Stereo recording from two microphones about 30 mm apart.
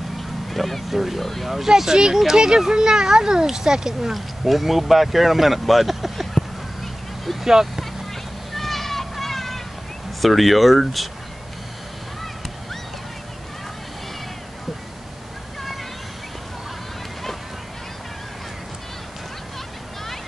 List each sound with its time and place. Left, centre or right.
0.5 s speech: centre
1.2 s speech: centre
1.8 s speech: centre
4.1 s speech: centre
7.3 s speech: centre
8.5 s a sound: centre
10.2 s speech: centre